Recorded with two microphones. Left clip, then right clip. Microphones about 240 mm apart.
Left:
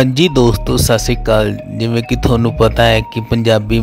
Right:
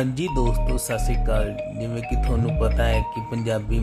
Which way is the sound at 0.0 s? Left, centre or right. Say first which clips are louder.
Left 13 dB; left.